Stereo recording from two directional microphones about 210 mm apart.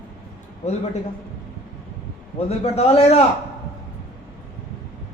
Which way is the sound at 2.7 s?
30° left (ahead or behind).